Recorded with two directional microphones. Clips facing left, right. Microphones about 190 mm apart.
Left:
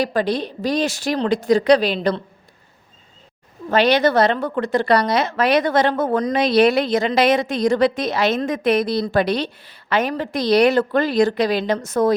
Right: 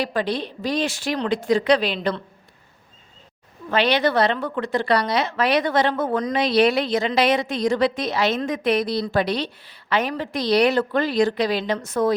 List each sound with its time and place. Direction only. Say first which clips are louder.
0.0 s a woman's voice: left 4 dB; 40° left (ahead or behind)
3.7 s a woman's voice: left 4 dB; 45° left (ahead or behind)